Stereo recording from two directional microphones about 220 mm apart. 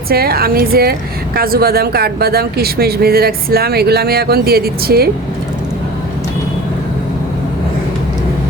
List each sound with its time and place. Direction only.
0.1 s speech: 45° right (ahead or behind)